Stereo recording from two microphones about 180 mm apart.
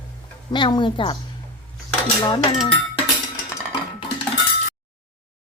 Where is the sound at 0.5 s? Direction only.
25° left (ahead or behind).